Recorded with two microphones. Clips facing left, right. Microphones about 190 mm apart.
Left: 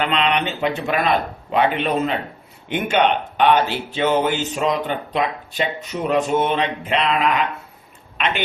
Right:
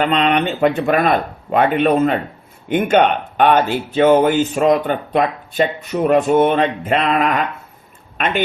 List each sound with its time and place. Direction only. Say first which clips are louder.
0.0 s speech: right 4 dB; 45° right (ahead or behind)